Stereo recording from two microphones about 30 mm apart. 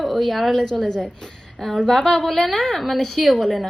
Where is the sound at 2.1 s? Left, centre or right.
Centre.